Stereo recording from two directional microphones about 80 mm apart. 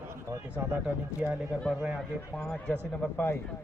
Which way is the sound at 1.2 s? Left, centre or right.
Right.